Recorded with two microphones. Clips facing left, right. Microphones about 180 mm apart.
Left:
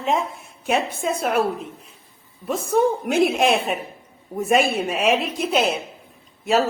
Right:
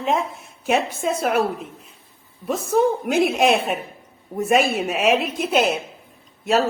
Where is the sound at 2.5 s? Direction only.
Centre (ahead or behind).